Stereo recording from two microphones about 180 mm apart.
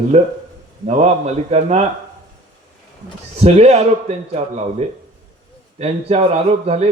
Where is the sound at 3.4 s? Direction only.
35° right (ahead or behind).